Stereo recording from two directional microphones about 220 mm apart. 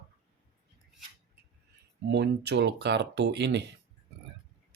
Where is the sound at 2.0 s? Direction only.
50° right (ahead or behind).